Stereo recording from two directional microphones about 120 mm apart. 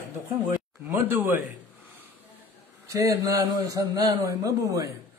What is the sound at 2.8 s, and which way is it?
A man's voice, 25° right (ahead or behind).